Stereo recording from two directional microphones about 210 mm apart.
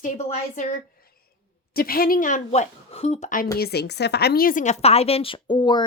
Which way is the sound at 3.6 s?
50° left (ahead or behind).